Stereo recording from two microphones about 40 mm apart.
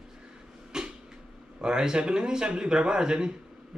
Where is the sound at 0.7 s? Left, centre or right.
Centre.